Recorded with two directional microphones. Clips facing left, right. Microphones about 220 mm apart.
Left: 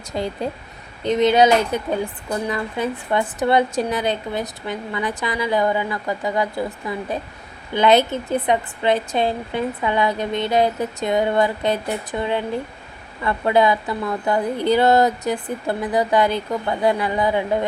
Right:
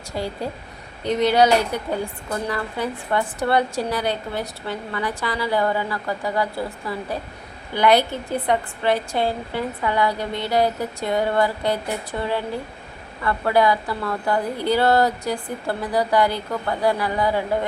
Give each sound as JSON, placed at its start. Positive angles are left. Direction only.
{"t": 0.1, "sound": "a woman's voice", "side_deg": 20}
{"t": 7.7, "sound": "a woman's voice", "side_deg": 20}